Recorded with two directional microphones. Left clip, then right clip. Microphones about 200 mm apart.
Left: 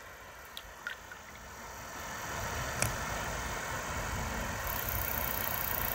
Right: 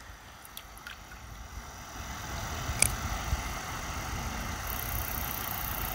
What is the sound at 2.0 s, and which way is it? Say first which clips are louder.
Vehicle: left 1 dB; 35° left (ahead or behind).